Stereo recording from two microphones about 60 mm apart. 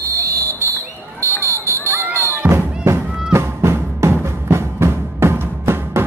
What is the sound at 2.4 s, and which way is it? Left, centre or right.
Music, right.